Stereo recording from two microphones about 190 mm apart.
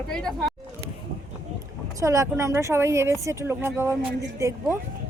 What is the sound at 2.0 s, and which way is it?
A woman's voice, 15° right (ahead or behind).